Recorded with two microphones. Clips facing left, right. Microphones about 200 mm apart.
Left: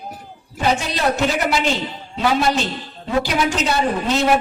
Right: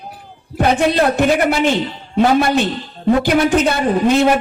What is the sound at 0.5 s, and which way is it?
A woman's voice, 55° right (ahead or behind).